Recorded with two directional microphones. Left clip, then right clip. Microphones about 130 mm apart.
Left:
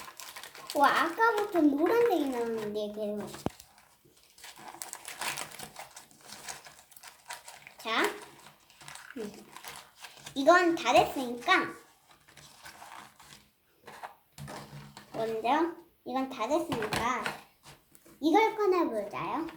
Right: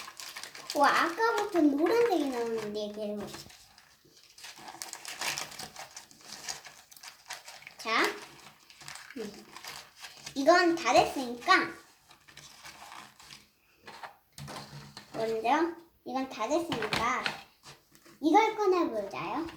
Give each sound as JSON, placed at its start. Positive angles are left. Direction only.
{"t": 0.4, "sound": "a child's voice", "side_deg": 10}
{"t": 4.6, "sound": "typewriter", "side_deg": 10}
{"t": 5.5, "sound": "sewing machine", "side_deg": 15}
{"t": 7.8, "sound": "a sound", "side_deg": 0}
{"t": 15.1, "sound": "a child's voice", "side_deg": 0}
{"t": 18.2, "sound": "a child's voice", "side_deg": 20}